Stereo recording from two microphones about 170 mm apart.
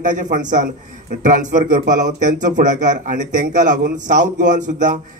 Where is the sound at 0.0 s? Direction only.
50° right (ahead or behind).